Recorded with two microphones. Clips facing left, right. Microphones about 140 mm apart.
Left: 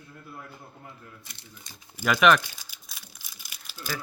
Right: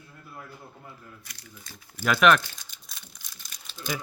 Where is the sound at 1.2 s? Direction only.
25° left (ahead or behind).